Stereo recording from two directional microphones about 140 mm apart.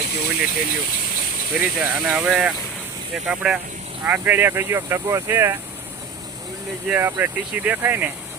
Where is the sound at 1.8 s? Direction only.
5° right (ahead or behind).